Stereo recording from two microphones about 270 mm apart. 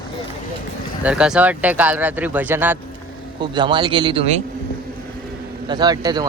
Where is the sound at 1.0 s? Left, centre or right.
Centre.